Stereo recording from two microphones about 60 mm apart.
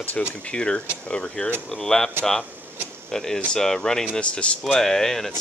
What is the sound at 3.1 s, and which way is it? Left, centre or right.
Speech, centre.